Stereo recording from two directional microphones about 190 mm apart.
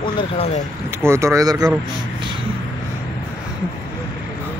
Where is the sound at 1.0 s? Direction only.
15° right (ahead or behind).